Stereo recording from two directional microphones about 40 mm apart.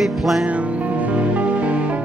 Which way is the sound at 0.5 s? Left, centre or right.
Right.